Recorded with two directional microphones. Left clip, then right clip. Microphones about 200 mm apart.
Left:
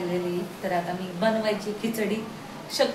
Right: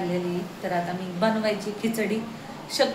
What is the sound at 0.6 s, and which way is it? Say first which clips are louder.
Speech: even; 10° right (ahead or behind).